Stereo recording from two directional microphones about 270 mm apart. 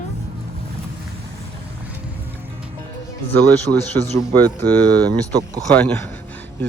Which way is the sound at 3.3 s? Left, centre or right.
Centre.